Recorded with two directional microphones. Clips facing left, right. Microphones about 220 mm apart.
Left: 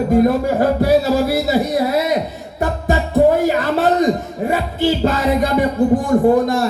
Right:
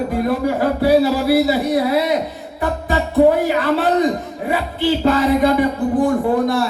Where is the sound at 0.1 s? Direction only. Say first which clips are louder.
Left 4 dB; 45° left (ahead or behind).